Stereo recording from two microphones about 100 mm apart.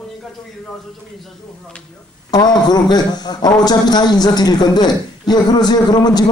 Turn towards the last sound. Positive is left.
turn(degrees=45)  # may be behind; listen again after turning